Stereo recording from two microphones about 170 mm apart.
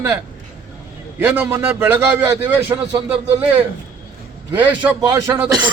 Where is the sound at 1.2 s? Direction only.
15° right (ahead or behind).